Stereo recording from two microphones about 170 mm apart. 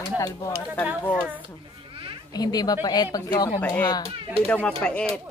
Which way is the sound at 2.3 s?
25° left (ahead or behind).